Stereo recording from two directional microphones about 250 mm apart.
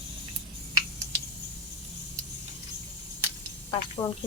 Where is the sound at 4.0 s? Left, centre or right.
Centre.